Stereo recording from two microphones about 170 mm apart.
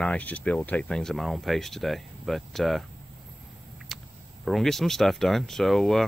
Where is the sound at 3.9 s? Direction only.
Centre (ahead or behind).